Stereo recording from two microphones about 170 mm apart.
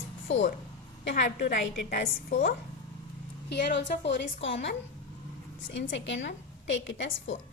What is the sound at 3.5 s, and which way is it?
A woman's voice, 90° left.